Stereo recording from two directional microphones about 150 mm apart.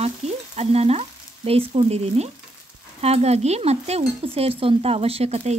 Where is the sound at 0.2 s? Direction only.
45° right (ahead or behind).